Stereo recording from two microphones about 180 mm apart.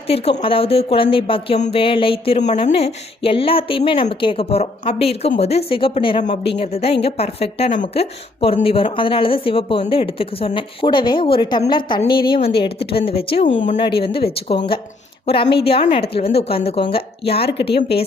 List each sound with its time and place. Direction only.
0.1 s a woman's voice: 30° left (ahead or behind)
17.4 s speech: 65° left (ahead or behind)